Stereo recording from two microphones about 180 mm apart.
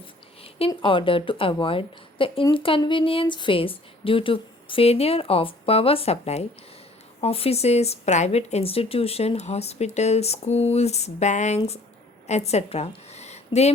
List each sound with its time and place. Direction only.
0.7 s a woman's voice: 30° left (ahead or behind)